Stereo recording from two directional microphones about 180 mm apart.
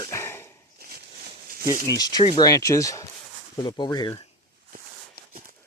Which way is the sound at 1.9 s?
20° left (ahead or behind).